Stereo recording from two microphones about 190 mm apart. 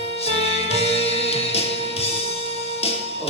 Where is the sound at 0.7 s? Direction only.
30° left (ahead or behind).